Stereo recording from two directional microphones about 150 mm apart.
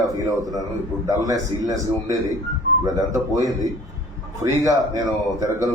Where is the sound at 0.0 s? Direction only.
25° right (ahead or behind).